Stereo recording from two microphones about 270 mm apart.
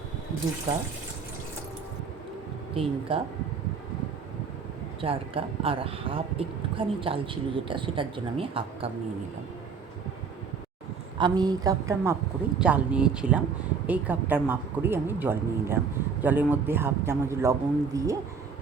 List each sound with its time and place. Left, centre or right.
2.8 s speech: right
4.9 s speech: centre
11.2 s a man's voice: centre